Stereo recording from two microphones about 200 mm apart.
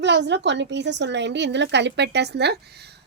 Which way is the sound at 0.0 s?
60° right (ahead or behind).